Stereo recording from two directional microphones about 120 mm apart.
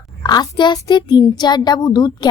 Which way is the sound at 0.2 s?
35° left (ahead or behind).